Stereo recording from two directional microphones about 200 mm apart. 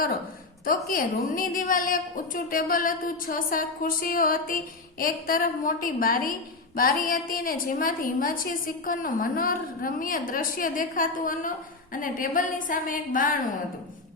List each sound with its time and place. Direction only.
0.6 s a woman's voice: 45° left (ahead or behind)